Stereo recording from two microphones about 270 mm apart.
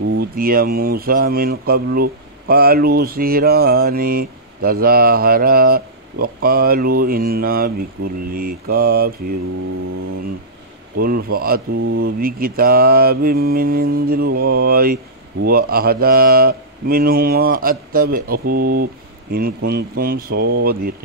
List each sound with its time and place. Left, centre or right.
0.2 s speech: right
11.0 s speech: right